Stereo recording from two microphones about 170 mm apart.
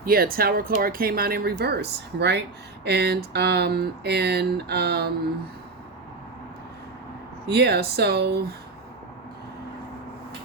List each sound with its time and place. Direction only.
0.0 s speech: 60° right (ahead or behind)
7.4 s speech: 70° right (ahead or behind)